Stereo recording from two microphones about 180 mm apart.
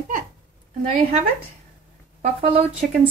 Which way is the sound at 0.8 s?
40° right (ahead or behind).